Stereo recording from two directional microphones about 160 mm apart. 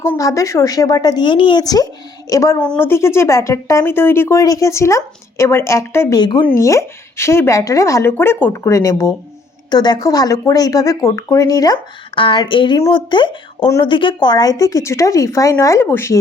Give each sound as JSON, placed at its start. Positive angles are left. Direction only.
{"t": 0.0, "sound": "speech", "side_deg": 20}
{"t": 6.1, "sound": "speech", "side_deg": 25}